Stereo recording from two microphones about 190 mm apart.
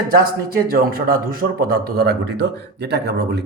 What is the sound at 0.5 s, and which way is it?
A man's voice, 50° right (ahead or behind).